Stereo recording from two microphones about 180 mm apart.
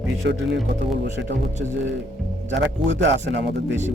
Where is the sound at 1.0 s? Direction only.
70° right (ahead or behind).